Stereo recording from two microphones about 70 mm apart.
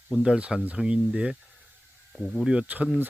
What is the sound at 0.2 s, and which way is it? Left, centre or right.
Speech, centre.